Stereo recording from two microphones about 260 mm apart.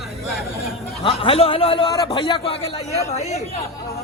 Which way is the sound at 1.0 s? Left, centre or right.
Left.